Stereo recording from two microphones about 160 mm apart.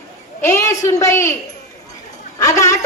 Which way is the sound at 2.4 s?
20° left (ahead or behind).